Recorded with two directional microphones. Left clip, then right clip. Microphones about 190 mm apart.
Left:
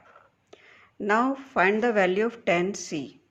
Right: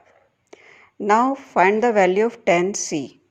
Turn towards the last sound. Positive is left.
turn(degrees=-35)  # may be behind; listen again after turning